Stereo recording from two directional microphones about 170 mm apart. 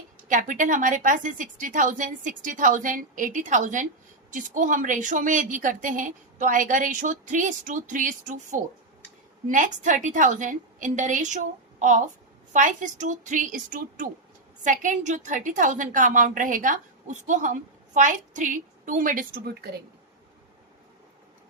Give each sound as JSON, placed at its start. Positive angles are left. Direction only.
{"t": 0.3, "sound": "a woman's voice", "side_deg": -50}